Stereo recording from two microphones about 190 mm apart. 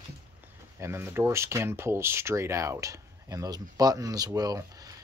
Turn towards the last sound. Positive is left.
turn(degrees=-20)  # may be behind; listen again after turning